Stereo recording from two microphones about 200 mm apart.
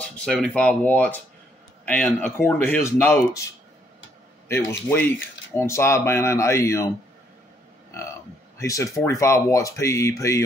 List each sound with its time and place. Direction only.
0.0 s speech: 5° left (ahead or behind)
4.5 s speech: 10° left (ahead or behind)
8.5 s speech: 15° left (ahead or behind)